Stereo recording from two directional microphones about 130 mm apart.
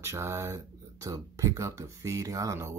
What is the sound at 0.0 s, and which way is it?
Speech, 20° right (ahead or behind).